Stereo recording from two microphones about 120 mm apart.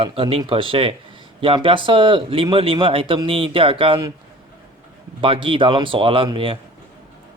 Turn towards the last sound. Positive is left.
turn(degrees=-45)  # may be behind; listen again after turning